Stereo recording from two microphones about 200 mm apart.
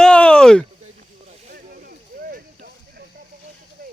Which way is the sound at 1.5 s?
50° right (ahead or behind).